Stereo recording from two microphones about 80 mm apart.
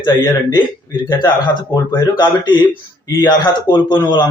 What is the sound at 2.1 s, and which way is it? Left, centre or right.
A man's voice, left.